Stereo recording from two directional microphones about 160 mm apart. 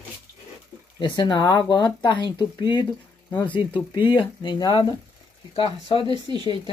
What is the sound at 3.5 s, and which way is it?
Speech, 30° left (ahead or behind).